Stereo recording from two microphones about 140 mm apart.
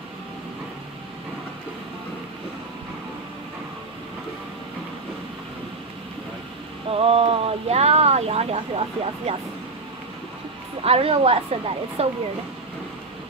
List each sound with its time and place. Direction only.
6.9 s speech: 45° right (ahead or behind)
10.8 s speech: 45° right (ahead or behind)